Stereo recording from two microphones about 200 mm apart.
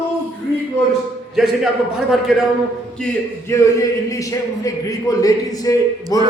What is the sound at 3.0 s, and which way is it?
Speech, 15° left (ahead or behind).